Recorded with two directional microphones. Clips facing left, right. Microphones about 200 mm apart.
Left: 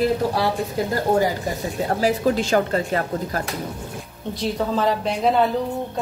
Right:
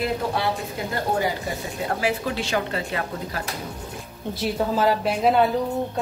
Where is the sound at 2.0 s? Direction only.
40° left (ahead or behind).